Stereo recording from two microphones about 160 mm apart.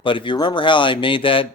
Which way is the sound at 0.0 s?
30° left (ahead or behind).